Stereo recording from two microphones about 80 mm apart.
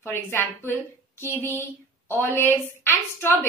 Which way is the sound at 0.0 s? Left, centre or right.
Left.